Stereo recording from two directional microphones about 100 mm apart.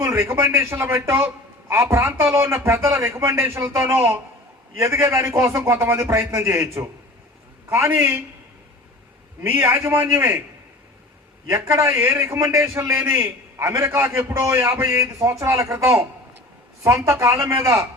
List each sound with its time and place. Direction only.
0.0 s a man's voice: 30° right (ahead or behind)
9.4 s a man's voice: 25° right (ahead or behind)
11.4 s a man's voice: 30° right (ahead or behind)